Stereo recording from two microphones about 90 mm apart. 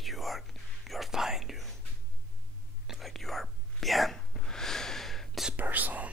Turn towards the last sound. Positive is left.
turn(degrees=-15)  # may be behind; listen again after turning